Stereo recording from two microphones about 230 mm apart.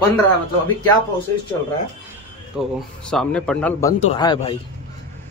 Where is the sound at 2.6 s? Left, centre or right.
Centre.